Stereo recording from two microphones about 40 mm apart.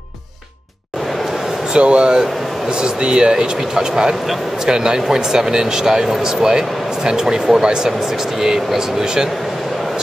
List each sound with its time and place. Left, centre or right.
1.7 s speech: right